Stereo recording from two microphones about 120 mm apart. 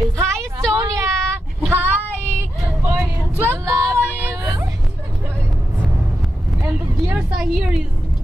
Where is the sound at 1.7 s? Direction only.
15° right (ahead or behind).